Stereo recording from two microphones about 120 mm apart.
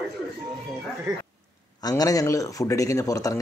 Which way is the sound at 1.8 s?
30° left (ahead or behind).